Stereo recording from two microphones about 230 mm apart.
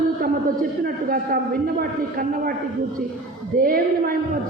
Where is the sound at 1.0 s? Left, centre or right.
Right.